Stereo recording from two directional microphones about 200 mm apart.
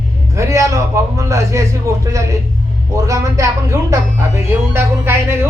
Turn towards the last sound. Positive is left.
turn(degrees=-10)  # may be behind; listen again after turning